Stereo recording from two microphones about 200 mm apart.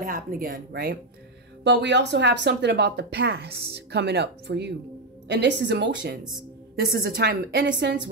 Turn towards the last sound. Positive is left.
turn(degrees=-60)  # may be behind; listen again after turning